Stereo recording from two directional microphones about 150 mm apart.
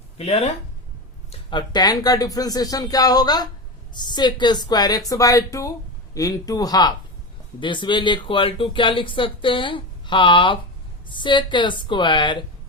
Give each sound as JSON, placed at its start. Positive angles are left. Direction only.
{"t": 0.2, "sound": "speech", "side_deg": 40}
{"t": 1.3, "sound": "speech", "side_deg": 30}